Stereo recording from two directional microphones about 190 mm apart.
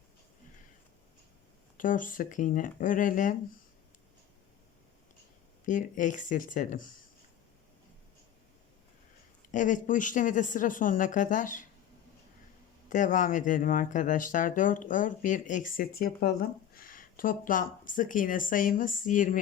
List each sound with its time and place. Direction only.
1.8 s speech: 45° left (ahead or behind)
5.6 s speech: 40° left (ahead or behind)
9.5 s speech: 40° left (ahead or behind)
12.9 s speech: 40° left (ahead or behind)